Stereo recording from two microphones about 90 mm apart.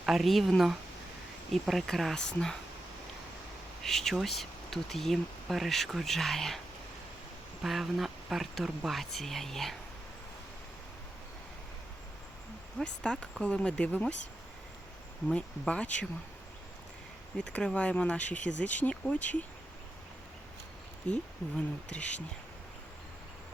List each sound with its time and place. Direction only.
0.0 s speech: centre (ahead or behind)
3.8 s speech: 5° left (ahead or behind)
7.6 s speech: centre (ahead or behind)
12.8 s speech: 10° left (ahead or behind)
15.3 s speech: 10° left (ahead or behind)
17.3 s speech: 10° left (ahead or behind)
21.1 s speech: 15° left (ahead or behind)